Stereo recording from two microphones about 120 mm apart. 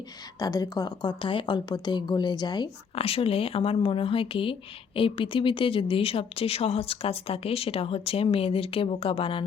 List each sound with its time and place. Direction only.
0.3 s speech: 30° left (ahead or behind)
2.9 s speech: 55° left (ahead or behind)